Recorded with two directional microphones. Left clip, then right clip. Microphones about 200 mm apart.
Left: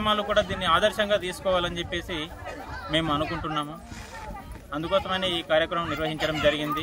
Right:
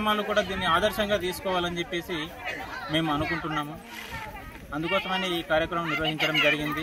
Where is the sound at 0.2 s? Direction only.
25° left (ahead or behind).